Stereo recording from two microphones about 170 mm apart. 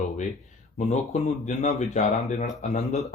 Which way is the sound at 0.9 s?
45° left (ahead or behind).